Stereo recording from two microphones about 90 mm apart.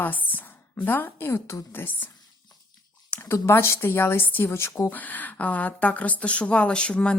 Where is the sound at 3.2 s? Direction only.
30° left (ahead or behind).